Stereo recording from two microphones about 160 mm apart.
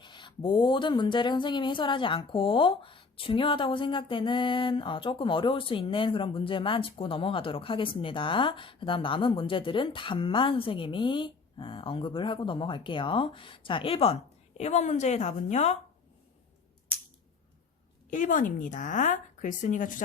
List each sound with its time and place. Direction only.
0.0 s speech: 30° left (ahead or behind); by 15.7 s 45° left (ahead or behind)
18.1 s speech: 55° left (ahead or behind)